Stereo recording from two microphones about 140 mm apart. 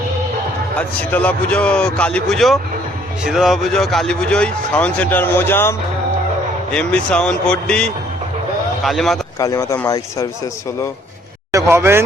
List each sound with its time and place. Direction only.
0.8 s a man's voice: 10° left (ahead or behind)
9.4 s speech: 25° left (ahead or behind)
11.5 s a man's voice: 20° right (ahead or behind)